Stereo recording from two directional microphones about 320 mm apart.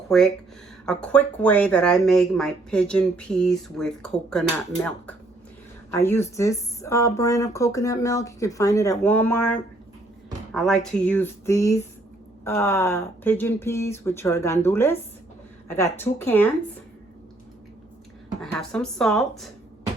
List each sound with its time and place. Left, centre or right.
0.1 s speech: centre
18.5 s speech: centre